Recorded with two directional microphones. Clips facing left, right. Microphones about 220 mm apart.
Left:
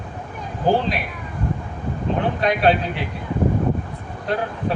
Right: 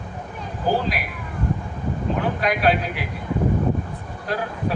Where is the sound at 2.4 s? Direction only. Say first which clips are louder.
Left 4 dB; 25° left (ahead or behind).